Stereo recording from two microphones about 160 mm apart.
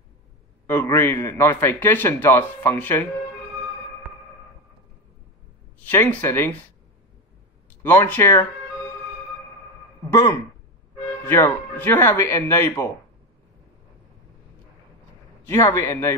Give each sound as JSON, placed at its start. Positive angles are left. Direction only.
{"t": 0.7, "sound": "a man's voice", "side_deg": 15}
{"t": 5.9, "sound": "a man's voice", "side_deg": 15}
{"t": 7.8, "sound": "a man's voice", "side_deg": 15}
{"t": 10.0, "sound": "a man's voice", "side_deg": 20}
{"t": 15.4, "sound": "a man's voice", "side_deg": 15}